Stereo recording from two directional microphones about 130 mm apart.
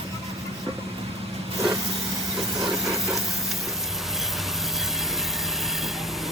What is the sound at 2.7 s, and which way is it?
Engine, 25° right (ahead or behind).